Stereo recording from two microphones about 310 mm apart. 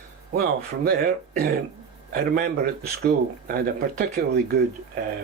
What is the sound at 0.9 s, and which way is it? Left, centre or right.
Speech, right.